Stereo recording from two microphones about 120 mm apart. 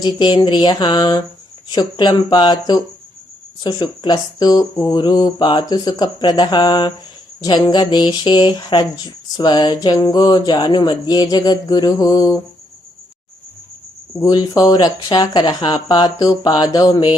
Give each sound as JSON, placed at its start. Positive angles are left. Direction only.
{"t": 0.0, "sound": "speech", "side_deg": 35}
{"t": 14.2, "sound": "speech", "side_deg": 30}